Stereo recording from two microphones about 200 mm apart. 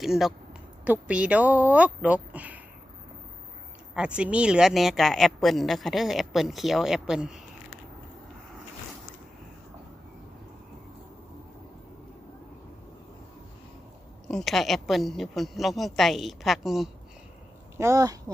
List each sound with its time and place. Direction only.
0.0 s speech: centre (ahead or behind)
3.9 s speech: 5° right (ahead or behind)
14.3 s speech: centre (ahead or behind)
17.7 s speech: 15° right (ahead or behind)